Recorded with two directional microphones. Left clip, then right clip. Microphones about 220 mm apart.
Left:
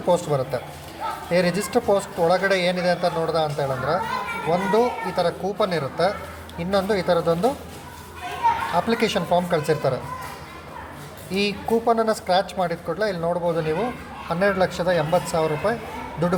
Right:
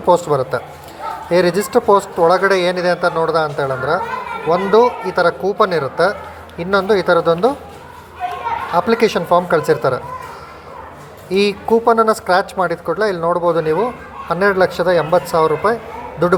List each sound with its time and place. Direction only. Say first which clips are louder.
0.1 s speech: right 8 dB; 15° right (ahead or behind)
8.7 s speech: right 7 dB; 15° right (ahead or behind)
11.3 s a man's voice: right 8 dB; 20° right (ahead or behind)